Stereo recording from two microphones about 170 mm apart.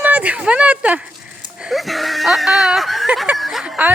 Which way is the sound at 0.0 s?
10° right (ahead or behind).